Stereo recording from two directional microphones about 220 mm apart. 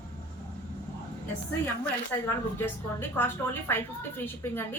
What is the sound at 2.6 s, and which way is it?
A woman's voice, 10° left (ahead or behind).